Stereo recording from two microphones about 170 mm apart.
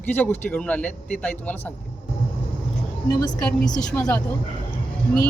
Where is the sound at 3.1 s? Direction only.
25° left (ahead or behind).